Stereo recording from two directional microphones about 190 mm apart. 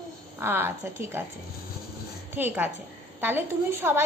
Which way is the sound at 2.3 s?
10° right (ahead or behind).